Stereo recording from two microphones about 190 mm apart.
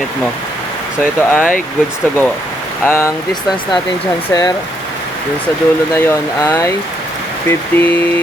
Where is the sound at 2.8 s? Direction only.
10° left (ahead or behind).